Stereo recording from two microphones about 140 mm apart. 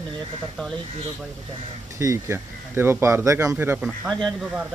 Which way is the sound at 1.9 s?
20° right (ahead or behind).